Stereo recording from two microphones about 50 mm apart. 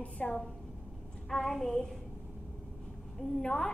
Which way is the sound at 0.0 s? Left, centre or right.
Left.